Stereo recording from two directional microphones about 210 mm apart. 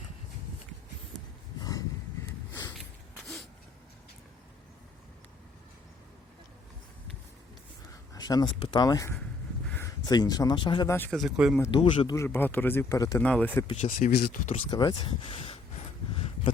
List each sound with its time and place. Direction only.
1.5 s a sound: 15° left (ahead or behind)
8.1 s speech: 20° left (ahead or behind); by 11.6 s centre (ahead or behind)
11.6 s speech: 25° left (ahead or behind); by 13.7 s 5° left (ahead or behind)
13.8 s speech: 45° left (ahead or behind)
14.7 s speech: 20° left (ahead or behind)